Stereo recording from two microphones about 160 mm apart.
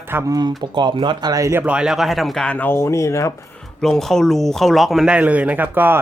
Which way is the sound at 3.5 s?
5° left (ahead or behind).